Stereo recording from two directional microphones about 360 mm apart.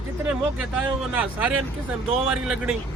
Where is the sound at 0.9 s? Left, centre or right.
Centre.